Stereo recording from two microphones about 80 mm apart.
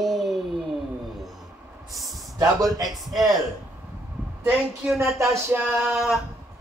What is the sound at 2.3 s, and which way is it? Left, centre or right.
Speech, right.